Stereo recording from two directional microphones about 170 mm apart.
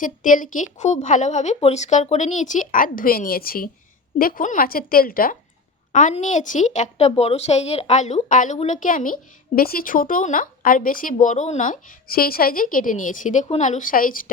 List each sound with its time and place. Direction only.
0.0 s a woman's voice: 50° left (ahead or behind)
5.9 s speech: 45° left (ahead or behind)